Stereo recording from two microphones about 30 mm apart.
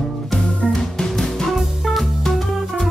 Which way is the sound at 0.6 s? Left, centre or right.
Left.